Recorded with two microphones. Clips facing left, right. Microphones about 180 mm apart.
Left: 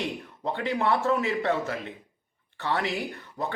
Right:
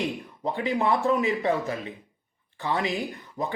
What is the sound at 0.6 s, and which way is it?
A man's voice, 15° right (ahead or behind).